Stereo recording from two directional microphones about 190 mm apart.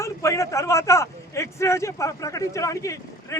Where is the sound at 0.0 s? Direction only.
15° left (ahead or behind).